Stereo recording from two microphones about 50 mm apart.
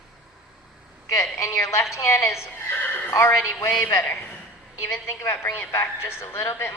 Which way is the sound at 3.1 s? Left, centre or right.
Left.